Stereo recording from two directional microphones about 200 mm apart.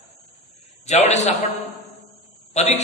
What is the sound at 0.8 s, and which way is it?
Speech, 35° left (ahead or behind).